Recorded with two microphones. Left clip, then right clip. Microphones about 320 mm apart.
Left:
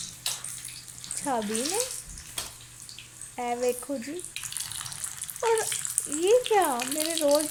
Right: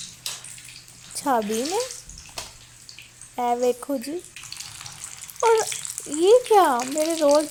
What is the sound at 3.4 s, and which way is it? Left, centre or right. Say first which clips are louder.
Speech: right 6 dB; right.